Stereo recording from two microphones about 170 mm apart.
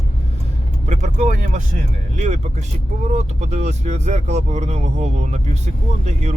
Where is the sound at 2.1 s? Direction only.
40° right (ahead or behind).